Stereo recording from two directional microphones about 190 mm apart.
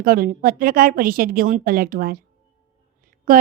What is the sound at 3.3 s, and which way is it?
Speech, 45° right (ahead or behind).